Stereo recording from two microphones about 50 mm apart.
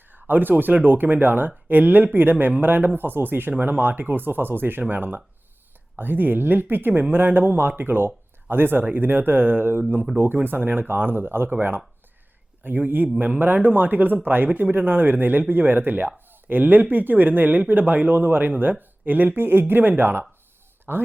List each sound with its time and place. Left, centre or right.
0.1 s speech: right
12.6 s speech: right